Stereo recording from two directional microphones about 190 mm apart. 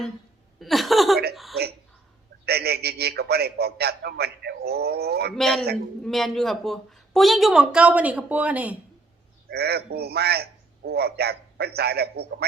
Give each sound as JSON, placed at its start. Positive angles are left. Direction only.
{"t": 0.6, "sound": "a woman's voice", "side_deg": 0}
{"t": 2.5, "sound": "a man's voice", "side_deg": -55}
{"t": 5.4, "sound": "a woman's voice", "side_deg": 0}
{"t": 9.5, "sound": "a man's voice", "side_deg": -55}